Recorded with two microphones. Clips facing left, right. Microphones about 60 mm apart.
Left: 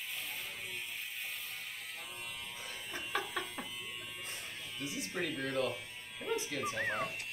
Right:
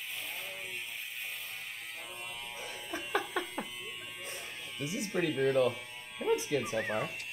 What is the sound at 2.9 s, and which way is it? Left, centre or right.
Laughter, centre.